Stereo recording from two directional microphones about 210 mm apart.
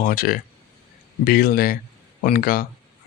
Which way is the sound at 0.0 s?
45° left (ahead or behind).